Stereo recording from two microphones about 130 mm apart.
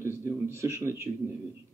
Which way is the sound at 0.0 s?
20° right (ahead or behind).